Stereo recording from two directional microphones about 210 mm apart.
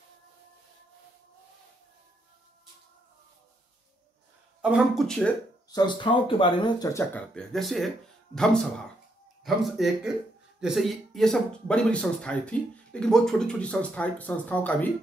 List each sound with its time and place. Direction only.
4.6 s speech: 5° right (ahead or behind)
5.7 s speech: 20° left (ahead or behind); by 7.9 s centre (ahead or behind)
9.4 s speech: centre (ahead or behind)